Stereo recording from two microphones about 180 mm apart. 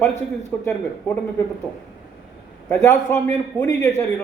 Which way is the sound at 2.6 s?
15° left (ahead or behind).